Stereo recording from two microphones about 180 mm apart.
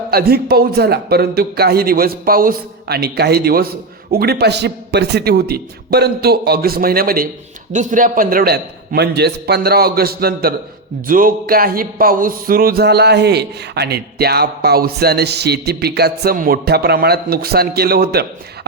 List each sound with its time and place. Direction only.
0.1 s speech: 60° right (ahead or behind)
7.7 s speech: 45° right (ahead or behind); by 18.3 s 60° right (ahead or behind)